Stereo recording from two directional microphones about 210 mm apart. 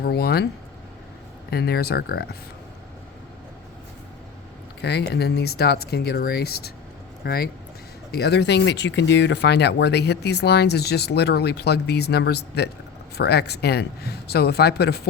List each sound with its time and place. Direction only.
0.0 s speech: 50° left (ahead or behind)
1.5 s speech: 50° left (ahead or behind)
4.8 s speech: 50° left (ahead or behind)